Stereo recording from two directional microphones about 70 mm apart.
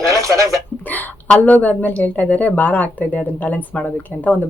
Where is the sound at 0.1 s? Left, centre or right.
Right.